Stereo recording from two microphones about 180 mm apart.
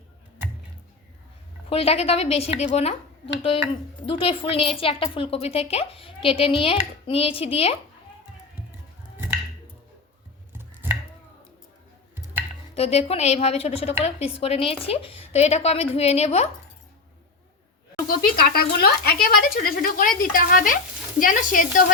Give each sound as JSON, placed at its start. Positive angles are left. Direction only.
{"t": 1.7, "sound": "a woman's voice", "side_deg": 35}
{"t": 4.0, "sound": "a woman's voice", "side_deg": 30}
{"t": 10.5, "sound": "chopping", "side_deg": -10}
{"t": 12.7, "sound": "a woman's voice", "side_deg": 35}
{"t": 18.1, "sound": "speech", "side_deg": 55}